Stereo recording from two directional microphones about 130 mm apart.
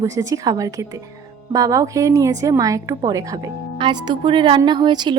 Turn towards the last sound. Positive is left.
turn(degrees=-35)  # may be behind; listen again after turning